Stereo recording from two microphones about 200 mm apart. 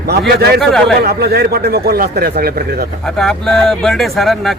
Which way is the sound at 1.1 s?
50° right (ahead or behind).